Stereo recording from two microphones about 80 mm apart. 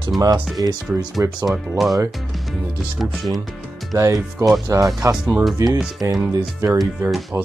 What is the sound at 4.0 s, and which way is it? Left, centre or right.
Speech, right.